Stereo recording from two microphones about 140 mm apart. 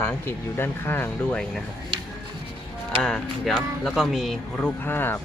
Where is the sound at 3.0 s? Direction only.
5° left (ahead or behind).